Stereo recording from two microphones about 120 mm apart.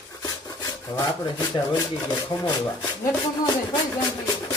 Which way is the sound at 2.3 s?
45° left (ahead or behind).